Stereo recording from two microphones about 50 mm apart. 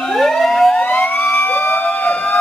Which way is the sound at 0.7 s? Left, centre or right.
Left.